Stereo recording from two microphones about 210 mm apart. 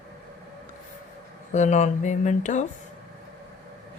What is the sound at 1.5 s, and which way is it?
Speech, 35° left (ahead or behind).